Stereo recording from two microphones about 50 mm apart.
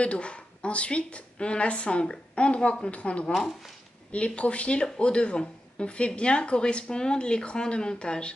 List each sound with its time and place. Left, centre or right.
0.0 s speech: left
3.3 s speech: centre
4.1 s speech: left